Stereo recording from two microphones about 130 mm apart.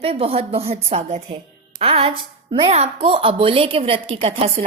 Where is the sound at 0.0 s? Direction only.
50° right (ahead or behind).